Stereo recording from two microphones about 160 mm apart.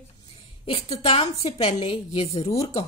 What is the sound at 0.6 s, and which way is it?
A woman's voice, 35° left (ahead or behind).